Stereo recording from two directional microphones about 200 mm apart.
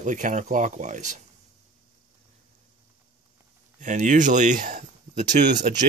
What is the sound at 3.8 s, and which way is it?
Speech, 40° right (ahead or behind).